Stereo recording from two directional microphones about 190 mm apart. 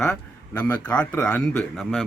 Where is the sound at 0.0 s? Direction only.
5° left (ahead or behind).